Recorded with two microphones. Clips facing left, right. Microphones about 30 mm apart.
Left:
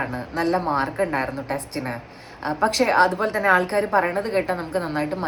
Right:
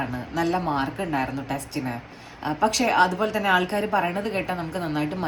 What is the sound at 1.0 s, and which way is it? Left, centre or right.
A woman's voice, left.